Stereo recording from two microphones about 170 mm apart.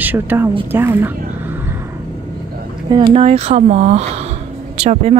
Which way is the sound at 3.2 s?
40° right (ahead or behind).